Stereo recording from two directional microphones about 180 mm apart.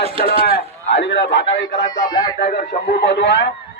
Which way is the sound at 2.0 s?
25° left (ahead or behind).